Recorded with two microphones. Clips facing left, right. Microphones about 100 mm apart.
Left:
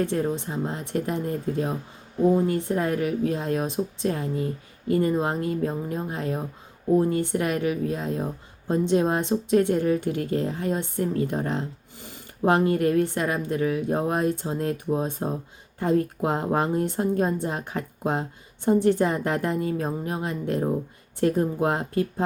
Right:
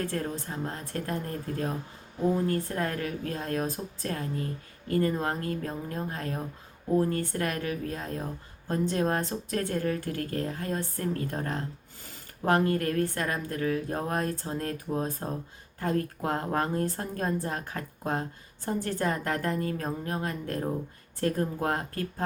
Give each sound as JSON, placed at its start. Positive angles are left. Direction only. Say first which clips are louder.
{"t": 0.0, "sound": "a woman's voice", "louder": "left 7 dB", "side_deg": 20}